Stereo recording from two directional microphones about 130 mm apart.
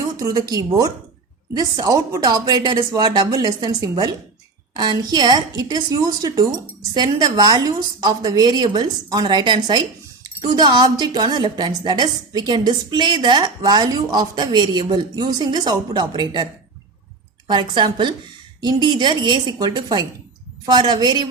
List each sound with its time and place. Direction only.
0.3 s a woman's voice: 30° right (ahead or behind)
17.5 s a woman's voice: 35° right (ahead or behind)